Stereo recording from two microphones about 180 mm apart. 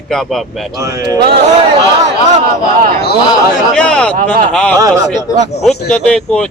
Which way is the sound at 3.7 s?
5° left (ahead or behind).